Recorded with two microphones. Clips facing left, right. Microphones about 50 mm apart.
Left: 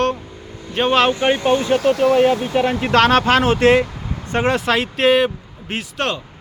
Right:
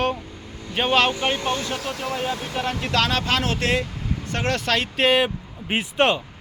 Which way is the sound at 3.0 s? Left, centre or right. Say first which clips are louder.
Left 9 dB; left.